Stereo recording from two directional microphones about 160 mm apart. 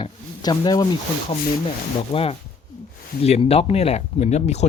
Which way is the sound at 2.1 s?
35° left (ahead or behind).